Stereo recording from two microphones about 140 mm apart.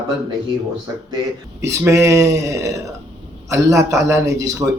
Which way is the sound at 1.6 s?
20° right (ahead or behind).